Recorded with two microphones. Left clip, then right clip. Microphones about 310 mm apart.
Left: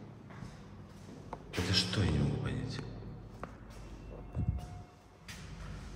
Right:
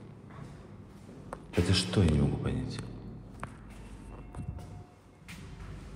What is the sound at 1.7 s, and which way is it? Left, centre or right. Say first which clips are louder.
Music: right 2 dB; centre.